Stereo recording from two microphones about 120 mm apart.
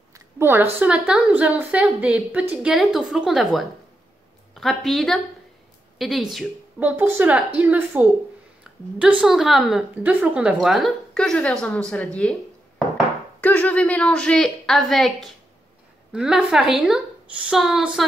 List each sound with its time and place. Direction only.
0.1 s a sound: 20° right (ahead or behind)
0.7 s a woman's voice: 10° right (ahead or behind)
6.8 s a woman's voice: 15° right (ahead or behind); by 12.4 s 5° left (ahead or behind)
13.4 s a woman's voice: 15° left (ahead or behind); by 18.0 s centre (ahead or behind)